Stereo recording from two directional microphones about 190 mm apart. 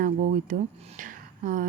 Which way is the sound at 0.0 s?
45° right (ahead or behind).